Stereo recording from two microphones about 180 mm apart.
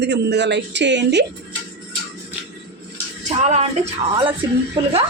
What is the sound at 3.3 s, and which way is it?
Speech, 40° right (ahead or behind).